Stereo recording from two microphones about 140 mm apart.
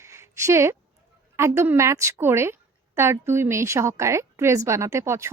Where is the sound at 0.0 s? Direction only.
20° right (ahead or behind).